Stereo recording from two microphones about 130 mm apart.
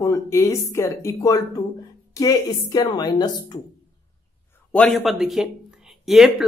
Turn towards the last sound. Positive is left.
turn(degrees=-5)  # may be behind; listen again after turning